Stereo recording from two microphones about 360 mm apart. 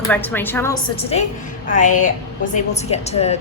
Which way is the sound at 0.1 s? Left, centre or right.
Centre.